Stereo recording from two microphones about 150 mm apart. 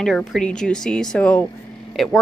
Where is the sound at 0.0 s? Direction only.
Centre (ahead or behind).